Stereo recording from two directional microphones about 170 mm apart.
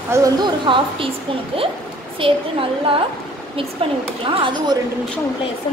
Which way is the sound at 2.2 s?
30° right (ahead or behind).